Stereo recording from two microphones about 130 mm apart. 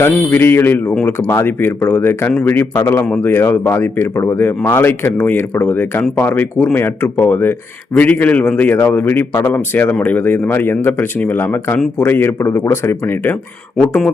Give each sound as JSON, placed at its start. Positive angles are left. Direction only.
{"t": 0.0, "sound": "speech", "side_deg": 15}